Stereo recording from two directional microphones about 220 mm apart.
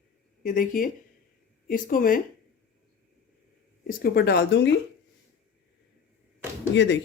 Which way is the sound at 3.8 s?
40° left (ahead or behind).